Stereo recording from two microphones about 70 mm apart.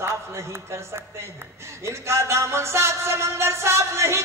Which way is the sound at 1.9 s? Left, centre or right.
Right.